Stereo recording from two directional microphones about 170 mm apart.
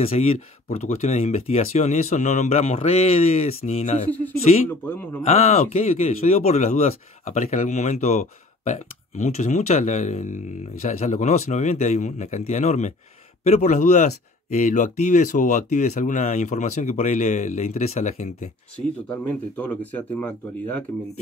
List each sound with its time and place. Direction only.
0.0 s speech: 35° left (ahead or behind)
4.1 s speech: 10° left (ahead or behind)
5.2 s speech: 40° left (ahead or behind)
19.0 s speech: 10° left (ahead or behind)